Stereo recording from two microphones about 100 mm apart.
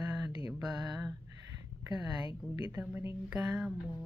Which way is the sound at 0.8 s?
40° right (ahead or behind).